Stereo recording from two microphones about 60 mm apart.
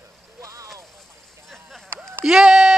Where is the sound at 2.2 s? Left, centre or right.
Centre.